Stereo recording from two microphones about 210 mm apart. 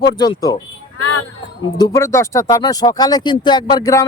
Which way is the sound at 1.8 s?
15° left (ahead or behind).